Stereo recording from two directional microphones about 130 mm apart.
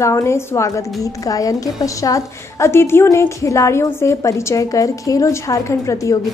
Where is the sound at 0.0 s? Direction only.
25° left (ahead or behind).